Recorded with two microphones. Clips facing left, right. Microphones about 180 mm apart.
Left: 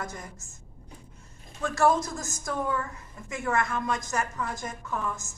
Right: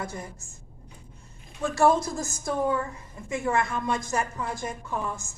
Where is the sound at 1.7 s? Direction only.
30° right (ahead or behind).